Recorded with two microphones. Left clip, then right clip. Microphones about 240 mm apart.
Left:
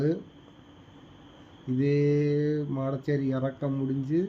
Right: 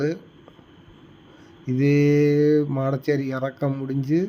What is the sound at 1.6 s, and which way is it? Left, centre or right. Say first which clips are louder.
Speech: right 6 dB; right.